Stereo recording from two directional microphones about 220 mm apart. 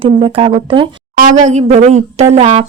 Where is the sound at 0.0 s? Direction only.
25° right (ahead or behind).